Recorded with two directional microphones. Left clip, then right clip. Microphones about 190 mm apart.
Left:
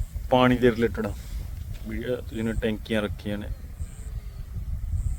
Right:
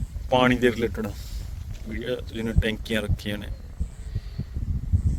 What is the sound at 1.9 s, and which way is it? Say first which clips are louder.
Speech: even; 20° right (ahead or behind).